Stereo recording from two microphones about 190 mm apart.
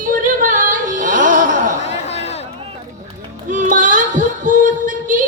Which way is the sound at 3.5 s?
40° right (ahead or behind).